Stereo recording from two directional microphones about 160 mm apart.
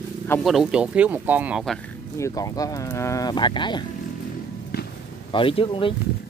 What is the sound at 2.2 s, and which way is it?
Speech, 20° left (ahead or behind).